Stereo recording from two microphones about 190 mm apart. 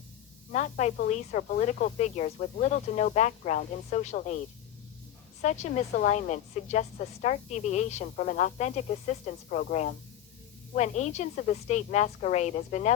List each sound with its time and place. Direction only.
0.5 s a woman's voice: 40° left (ahead or behind)
5.4 s a woman's voice: 40° left (ahead or behind)